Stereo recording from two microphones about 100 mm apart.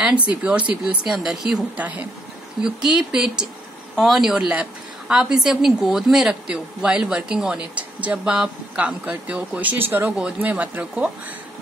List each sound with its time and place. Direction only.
0.3 s a woman's voice: 10° right (ahead or behind)
1.8 s a woman's voice: 15° right (ahead or behind)